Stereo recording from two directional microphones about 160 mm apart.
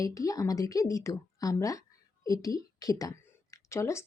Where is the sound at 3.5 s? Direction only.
20° left (ahead or behind).